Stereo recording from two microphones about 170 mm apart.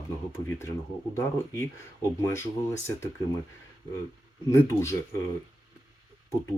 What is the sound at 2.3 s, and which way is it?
Speech, 15° left (ahead or behind).